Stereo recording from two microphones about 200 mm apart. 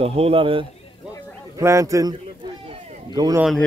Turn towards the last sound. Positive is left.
turn(degrees=-20)  # may be behind; listen again after turning